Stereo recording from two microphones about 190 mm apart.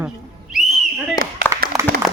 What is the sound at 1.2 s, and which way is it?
Speech, 20° left (ahead or behind).